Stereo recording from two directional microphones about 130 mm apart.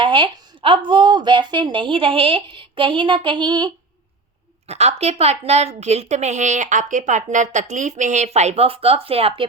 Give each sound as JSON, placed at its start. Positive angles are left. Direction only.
{"t": 0.0, "sound": "a woman's voice", "side_deg": -40}
{"t": 4.7, "sound": "a woman's voice", "side_deg": -55}